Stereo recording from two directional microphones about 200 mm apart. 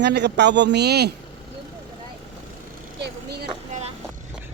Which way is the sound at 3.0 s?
55° right (ahead or behind).